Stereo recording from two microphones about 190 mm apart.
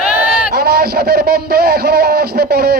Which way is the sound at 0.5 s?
55° right (ahead or behind).